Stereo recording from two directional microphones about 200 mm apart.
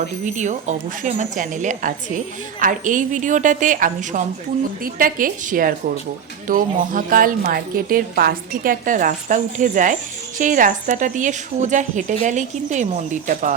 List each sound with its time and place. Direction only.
0.3 s a woman's voice: 35° right (ahead or behind)